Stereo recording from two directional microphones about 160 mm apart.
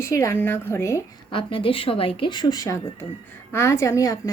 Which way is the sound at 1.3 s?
30° left (ahead or behind).